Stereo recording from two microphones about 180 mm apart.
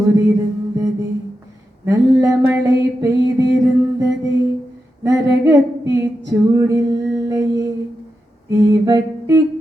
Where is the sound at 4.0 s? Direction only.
20° right (ahead or behind).